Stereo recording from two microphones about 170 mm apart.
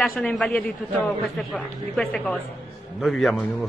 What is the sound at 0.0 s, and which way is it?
A man's voice, 5° left (ahead or behind).